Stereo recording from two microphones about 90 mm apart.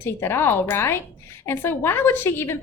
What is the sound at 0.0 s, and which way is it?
A woman's voice, 25° left (ahead or behind).